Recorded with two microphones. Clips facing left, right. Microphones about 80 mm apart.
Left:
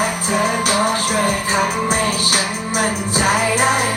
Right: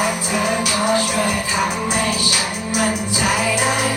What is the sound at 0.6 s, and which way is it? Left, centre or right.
Music, left.